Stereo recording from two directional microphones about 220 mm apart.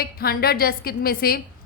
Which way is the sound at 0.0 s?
45° left (ahead or behind).